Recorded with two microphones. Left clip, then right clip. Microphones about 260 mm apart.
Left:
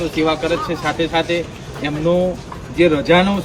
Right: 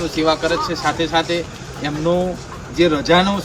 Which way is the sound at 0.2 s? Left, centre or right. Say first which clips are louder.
Right 1 dB; centre.